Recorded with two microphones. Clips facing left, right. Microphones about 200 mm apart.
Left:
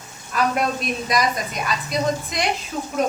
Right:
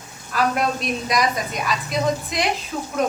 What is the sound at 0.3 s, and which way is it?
A woman's voice, centre (ahead or behind).